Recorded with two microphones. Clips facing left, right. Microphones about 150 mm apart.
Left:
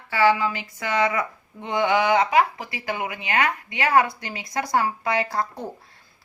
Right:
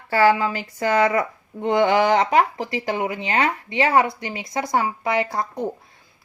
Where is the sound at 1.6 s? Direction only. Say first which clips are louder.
Right 4 dB; 45° right (ahead or behind).